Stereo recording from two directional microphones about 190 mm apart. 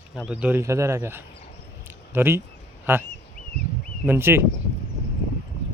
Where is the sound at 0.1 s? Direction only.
5° right (ahead or behind).